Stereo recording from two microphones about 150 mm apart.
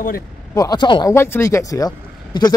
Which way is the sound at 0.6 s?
25° left (ahead or behind).